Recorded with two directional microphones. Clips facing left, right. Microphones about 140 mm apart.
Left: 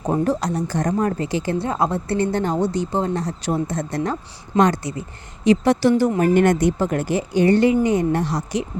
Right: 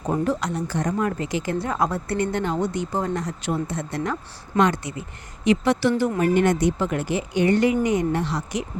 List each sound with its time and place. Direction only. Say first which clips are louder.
0.1 s speech: left 3 dB; 35° left (ahead or behind)
6.1 s speech: left 3 dB; 50° left (ahead or behind)